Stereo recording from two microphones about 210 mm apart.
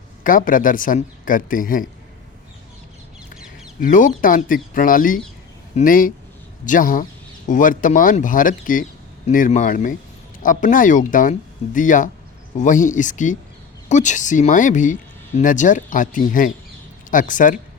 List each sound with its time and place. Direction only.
0.3 s speech: 40° left (ahead or behind)
3.8 s speech: 40° left (ahead or behind)